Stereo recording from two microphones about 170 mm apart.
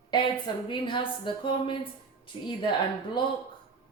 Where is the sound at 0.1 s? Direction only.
30° left (ahead or behind).